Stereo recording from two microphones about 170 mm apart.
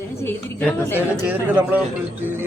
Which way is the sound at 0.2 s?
15° left (ahead or behind).